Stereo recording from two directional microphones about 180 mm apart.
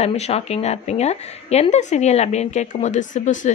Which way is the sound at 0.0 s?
35° left (ahead or behind).